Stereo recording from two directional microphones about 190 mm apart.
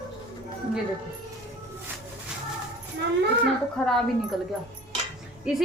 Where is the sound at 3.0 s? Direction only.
65° right (ahead or behind).